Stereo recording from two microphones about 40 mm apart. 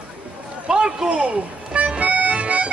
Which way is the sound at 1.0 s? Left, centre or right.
Right.